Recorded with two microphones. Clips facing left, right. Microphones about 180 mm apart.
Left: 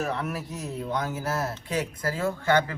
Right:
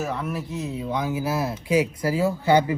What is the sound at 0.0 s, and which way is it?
Speech, centre (ahead or behind).